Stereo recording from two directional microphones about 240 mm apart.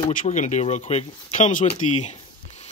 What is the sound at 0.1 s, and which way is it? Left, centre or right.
Speech, left.